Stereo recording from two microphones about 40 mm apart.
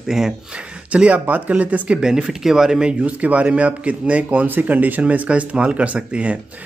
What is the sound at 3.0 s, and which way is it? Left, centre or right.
Speech, right.